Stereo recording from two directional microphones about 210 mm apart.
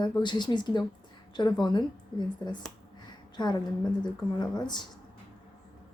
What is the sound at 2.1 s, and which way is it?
Speech, 20° left (ahead or behind).